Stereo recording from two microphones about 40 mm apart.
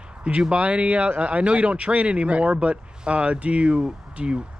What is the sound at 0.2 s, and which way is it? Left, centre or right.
Speech, right.